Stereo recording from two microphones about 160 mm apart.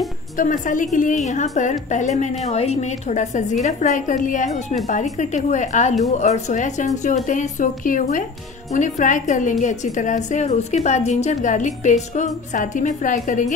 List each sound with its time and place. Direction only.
0.4 s a woman's voice: 55° left (ahead or behind)